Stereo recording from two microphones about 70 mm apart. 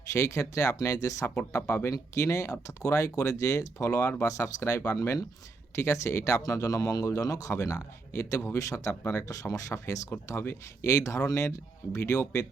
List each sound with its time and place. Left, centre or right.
0.1 s a man's voice: left
1.6 s speech: left
1.9 s a man's voice: left
6.4 s a man's voice: left
9.3 s a man's voice: left
10.2 s a man's voice: left